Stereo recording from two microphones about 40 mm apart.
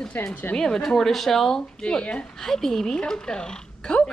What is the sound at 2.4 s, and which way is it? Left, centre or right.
Speech, centre.